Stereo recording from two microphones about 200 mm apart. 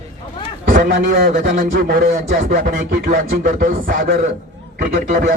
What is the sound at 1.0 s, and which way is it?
A man's voice, 45° right (ahead or behind).